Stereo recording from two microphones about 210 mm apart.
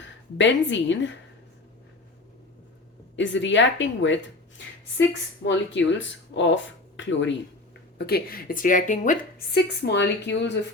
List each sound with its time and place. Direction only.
0.0 s a woman's voice: 60° left (ahead or behind)
3.2 s a woman's voice: 60° left (ahead or behind)
7.9 s speech: 50° left (ahead or behind)
9.6 s speech: 55° left (ahead or behind)